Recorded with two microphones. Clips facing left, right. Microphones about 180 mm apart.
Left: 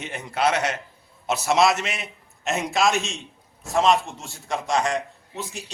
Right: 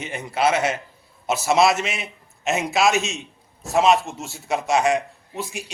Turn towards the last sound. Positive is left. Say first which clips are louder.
# right 3 dB
turn(degrees=-10)  # may be behind; listen again after turning